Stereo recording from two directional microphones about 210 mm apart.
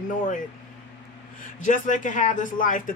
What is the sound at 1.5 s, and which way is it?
A man's voice, 35° left (ahead or behind).